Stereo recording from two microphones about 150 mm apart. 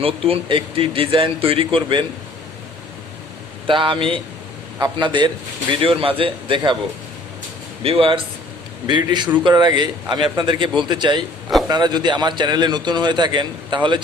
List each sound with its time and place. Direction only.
0.0 s speech: 40° right (ahead or behind)
3.7 s speech: 35° right (ahead or behind)
7.8 s a man's voice: 35° right (ahead or behind)